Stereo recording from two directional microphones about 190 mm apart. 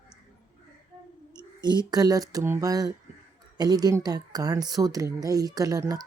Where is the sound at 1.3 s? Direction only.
20° right (ahead or behind).